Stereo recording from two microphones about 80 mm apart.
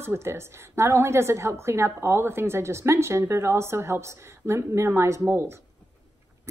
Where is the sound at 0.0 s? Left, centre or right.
Right.